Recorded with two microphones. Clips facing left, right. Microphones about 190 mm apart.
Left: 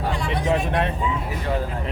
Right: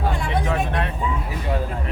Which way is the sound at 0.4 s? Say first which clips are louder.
Left 2 dB; 20° left (ahead or behind).